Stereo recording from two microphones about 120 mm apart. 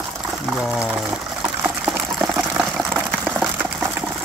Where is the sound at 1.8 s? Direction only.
10° right (ahead or behind).